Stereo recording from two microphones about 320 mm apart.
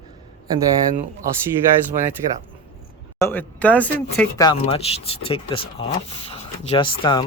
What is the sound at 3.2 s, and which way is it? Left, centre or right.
Speech, centre.